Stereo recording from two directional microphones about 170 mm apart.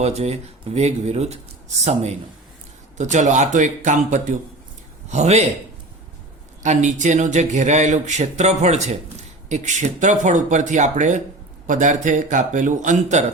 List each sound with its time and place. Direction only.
0.0 s speech: 40° right (ahead or behind)
6.6 s speech: 45° right (ahead or behind)